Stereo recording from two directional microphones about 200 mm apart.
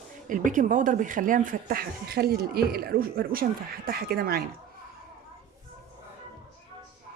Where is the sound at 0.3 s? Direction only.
40° right (ahead or behind).